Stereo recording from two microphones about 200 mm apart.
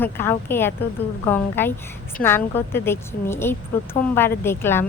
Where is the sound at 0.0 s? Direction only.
10° left (ahead or behind).